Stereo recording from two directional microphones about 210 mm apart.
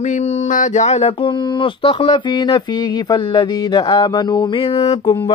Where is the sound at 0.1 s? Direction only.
35° left (ahead or behind).